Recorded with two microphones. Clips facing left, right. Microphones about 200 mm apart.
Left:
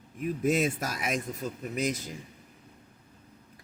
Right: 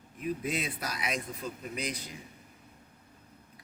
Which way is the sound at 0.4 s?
45° left (ahead or behind).